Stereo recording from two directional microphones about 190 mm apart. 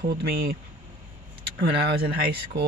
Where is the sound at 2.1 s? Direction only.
55° right (ahead or behind).